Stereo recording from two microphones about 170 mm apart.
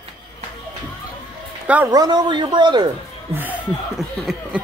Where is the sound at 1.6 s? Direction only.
10° right (ahead or behind).